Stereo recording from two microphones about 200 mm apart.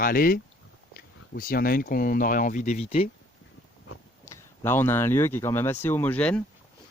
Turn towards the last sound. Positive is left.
turn(degrees=5)  # may be behind; listen again after turning